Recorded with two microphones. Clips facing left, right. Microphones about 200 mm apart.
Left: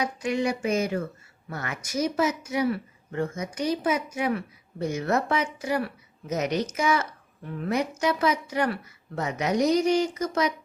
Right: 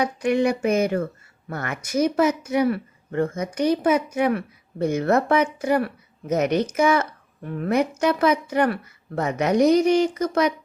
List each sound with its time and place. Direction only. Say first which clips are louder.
0.0 s speech: right 6 dB; 60° right (ahead or behind)